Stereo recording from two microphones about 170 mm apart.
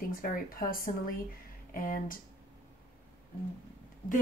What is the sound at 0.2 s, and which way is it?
Speech, 55° left (ahead or behind).